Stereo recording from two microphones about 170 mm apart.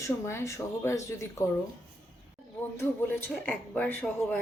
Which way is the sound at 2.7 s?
15° left (ahead or behind).